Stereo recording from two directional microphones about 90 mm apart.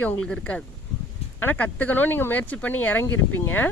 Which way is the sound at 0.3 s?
15° left (ahead or behind).